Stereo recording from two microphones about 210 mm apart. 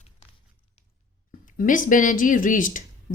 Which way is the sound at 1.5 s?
40° left (ahead or behind).